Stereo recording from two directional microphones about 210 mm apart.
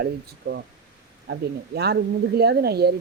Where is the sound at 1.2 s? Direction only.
50° right (ahead or behind).